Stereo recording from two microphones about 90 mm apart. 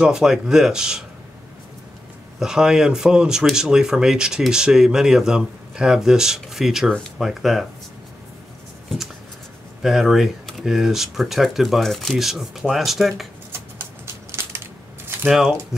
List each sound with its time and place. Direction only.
0.0 s speech: 5° right (ahead or behind)
2.4 s speech: 5° right (ahead or behind)
9.8 s speech: 5° right (ahead or behind)
14.0 s crushing: 30° right (ahead or behind)
15.2 s speech: 5° right (ahead or behind)